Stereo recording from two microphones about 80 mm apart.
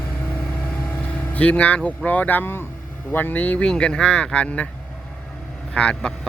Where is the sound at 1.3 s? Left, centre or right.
Centre.